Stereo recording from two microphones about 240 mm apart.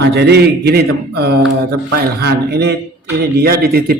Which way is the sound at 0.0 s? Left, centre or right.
Right.